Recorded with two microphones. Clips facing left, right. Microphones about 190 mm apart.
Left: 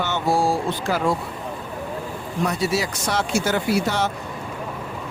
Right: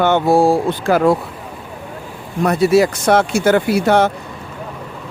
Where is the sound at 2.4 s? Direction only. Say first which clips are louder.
Right 10 dB; 55° right (ahead or behind).